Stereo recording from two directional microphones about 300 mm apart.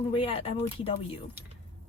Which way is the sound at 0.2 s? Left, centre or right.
Centre.